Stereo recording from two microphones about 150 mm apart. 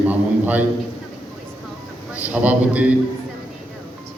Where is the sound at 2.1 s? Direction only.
10° right (ahead or behind).